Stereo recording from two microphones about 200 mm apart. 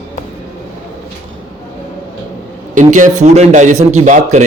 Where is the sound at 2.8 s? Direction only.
40° right (ahead or behind).